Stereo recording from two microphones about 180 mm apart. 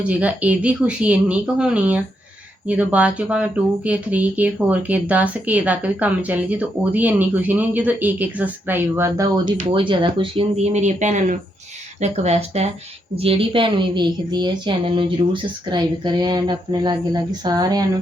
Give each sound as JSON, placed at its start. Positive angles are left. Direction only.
{"t": 0.0, "sound": "a woman's voice", "side_deg": -10}